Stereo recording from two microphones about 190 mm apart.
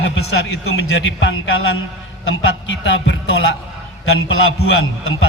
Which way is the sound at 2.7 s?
75° left (ahead or behind).